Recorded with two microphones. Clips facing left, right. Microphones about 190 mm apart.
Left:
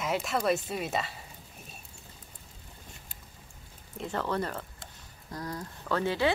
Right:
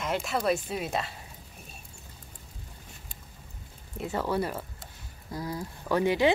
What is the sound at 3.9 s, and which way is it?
A woman's voice, 5° right (ahead or behind).